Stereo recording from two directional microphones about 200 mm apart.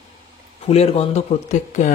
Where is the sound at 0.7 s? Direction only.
30° left (ahead or behind).